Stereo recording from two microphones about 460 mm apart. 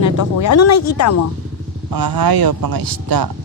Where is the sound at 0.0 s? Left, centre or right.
Left.